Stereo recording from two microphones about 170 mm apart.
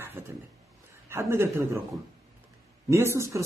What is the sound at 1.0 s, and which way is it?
Speech, 15° right (ahead or behind).